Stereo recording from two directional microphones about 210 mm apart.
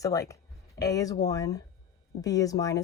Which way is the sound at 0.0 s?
15° left (ahead or behind).